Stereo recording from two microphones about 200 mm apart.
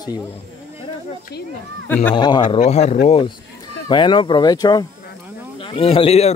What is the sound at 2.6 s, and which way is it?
A man's voice, 35° left (ahead or behind).